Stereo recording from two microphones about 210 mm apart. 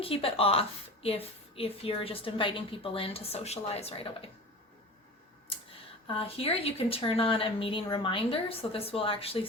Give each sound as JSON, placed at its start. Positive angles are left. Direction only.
{"t": 0.0, "sound": "a woman's voice", "side_deg": 25}
{"t": 6.1, "sound": "a woman's voice", "side_deg": 25}